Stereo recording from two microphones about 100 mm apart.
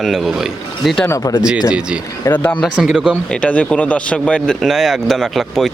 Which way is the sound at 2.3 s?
15° left (ahead or behind).